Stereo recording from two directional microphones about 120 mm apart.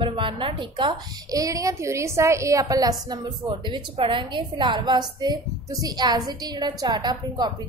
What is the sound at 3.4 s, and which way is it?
A woman's voice, 45° right (ahead or behind).